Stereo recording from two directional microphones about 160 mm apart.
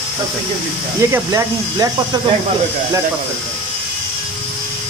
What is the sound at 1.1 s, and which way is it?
Speech, 20° right (ahead or behind).